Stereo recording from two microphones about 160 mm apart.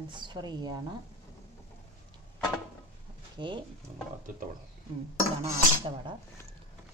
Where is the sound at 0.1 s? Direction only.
30° right (ahead or behind).